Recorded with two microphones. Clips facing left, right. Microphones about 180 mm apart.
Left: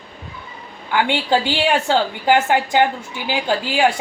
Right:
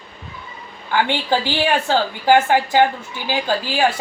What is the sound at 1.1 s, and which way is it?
A woman's voice, 20° left (ahead or behind).